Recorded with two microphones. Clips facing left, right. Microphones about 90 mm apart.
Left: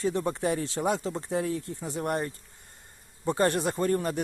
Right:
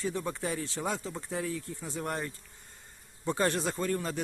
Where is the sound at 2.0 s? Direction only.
45° left (ahead or behind).